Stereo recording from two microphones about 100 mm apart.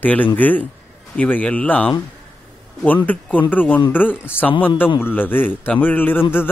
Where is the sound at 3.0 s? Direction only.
15° left (ahead or behind).